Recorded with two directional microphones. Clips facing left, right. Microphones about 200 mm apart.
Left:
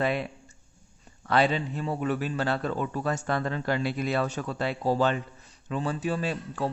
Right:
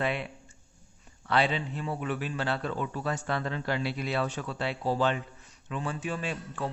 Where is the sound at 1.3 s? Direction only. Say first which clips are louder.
Left 3 dB; 45° left (ahead or behind).